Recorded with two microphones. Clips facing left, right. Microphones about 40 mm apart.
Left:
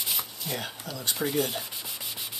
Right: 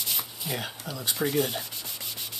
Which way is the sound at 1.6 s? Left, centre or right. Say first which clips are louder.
Left 1 dB; centre.